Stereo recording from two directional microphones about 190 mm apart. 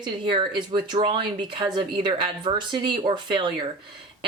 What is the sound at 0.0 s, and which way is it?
Speech, 25° right (ahead or behind).